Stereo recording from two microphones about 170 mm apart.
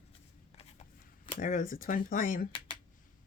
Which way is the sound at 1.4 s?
55° left (ahead or behind).